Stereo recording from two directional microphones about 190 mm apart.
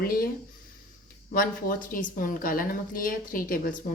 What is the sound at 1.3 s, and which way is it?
A woman's voice, 50° left (ahead or behind).